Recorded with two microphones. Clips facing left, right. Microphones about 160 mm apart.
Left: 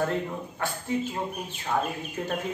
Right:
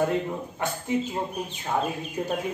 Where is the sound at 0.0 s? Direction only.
15° right (ahead or behind).